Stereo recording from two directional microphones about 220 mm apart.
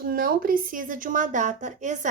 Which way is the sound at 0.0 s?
40° right (ahead or behind).